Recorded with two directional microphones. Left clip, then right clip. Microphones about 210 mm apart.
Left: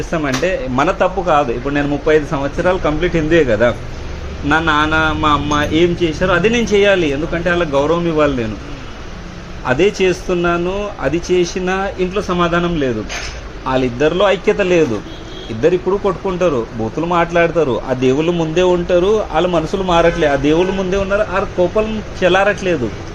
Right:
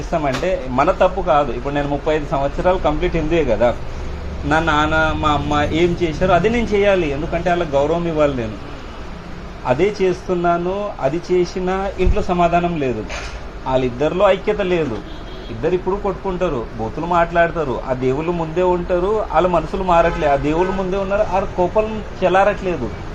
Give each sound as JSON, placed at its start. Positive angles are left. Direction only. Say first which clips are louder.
{"t": 0.1, "sound": "a man's voice", "louder": "left 1 dB", "side_deg": 40}
{"t": 9.6, "sound": "a man's voice", "louder": "left 3 dB", "side_deg": 45}
{"t": 22.2, "sound": "speech", "louder": "left 2 dB", "side_deg": 45}